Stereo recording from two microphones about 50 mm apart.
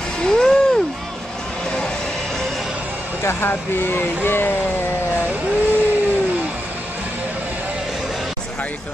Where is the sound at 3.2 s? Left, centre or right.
Left.